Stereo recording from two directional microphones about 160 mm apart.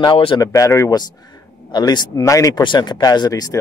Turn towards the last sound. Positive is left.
turn(degrees=25)  # may be behind; listen again after turning